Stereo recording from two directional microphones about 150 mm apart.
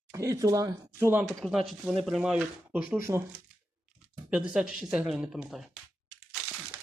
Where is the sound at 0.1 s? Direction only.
20° right (ahead or behind).